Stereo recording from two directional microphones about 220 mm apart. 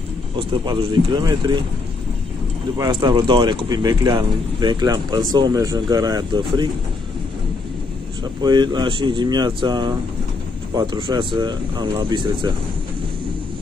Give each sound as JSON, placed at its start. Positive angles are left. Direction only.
{"t": 0.4, "sound": "speech", "side_deg": -25}
{"t": 2.8, "sound": "speech", "side_deg": -20}
{"t": 8.2, "sound": "speech", "side_deg": -20}